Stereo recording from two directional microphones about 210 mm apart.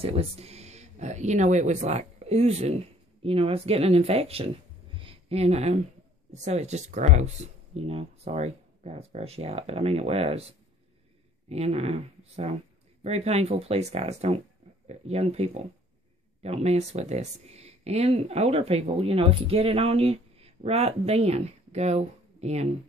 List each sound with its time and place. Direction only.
0.0 s speech: 30° right (ahead or behind)
4.9 s a sound: 25° right (ahead or behind)
6.3 s speech: 35° right (ahead or behind)
11.4 s speech: 30° right (ahead or behind)